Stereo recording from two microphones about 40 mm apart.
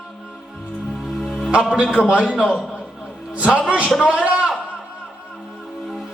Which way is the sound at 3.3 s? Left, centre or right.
Right.